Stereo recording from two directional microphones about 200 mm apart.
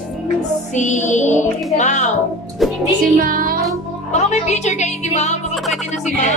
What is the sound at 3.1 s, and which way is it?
Music, 45° right (ahead or behind).